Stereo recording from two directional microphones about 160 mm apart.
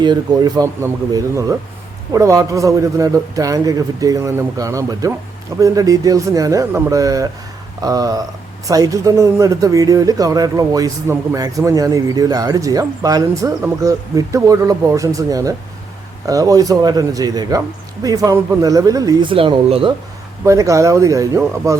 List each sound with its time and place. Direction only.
0.0 s speech: 25° right (ahead or behind)
19.3 s speech: 35° right (ahead or behind)
20.4 s speech: 20° right (ahead or behind)